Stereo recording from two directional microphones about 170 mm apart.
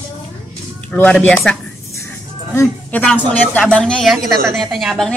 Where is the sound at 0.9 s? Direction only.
10° left (ahead or behind).